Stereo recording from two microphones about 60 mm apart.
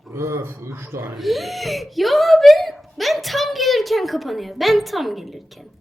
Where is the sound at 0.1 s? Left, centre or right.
Right.